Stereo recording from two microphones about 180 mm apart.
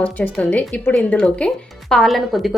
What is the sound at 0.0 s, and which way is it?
Speech, 10° left (ahead or behind).